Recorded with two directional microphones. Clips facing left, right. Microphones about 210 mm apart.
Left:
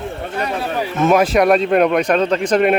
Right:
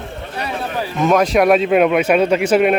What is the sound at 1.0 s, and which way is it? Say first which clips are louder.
Speech: even; 5° left (ahead or behind).